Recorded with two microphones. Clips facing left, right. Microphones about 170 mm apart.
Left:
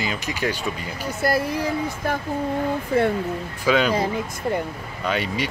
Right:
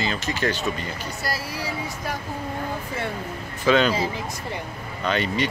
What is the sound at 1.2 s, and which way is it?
Speech, 55° left (ahead or behind).